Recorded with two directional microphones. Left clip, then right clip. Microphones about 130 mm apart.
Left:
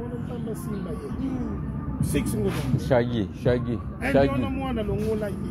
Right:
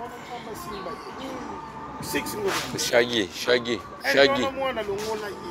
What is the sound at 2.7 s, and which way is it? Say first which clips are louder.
Speech: right 2 dB; 90° right.